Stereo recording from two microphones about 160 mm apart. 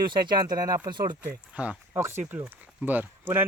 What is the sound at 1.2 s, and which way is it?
Speech, 10° right (ahead or behind).